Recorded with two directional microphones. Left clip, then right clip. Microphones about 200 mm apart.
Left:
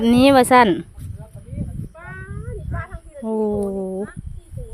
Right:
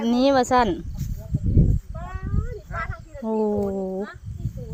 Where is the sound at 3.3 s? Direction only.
10° left (ahead or behind).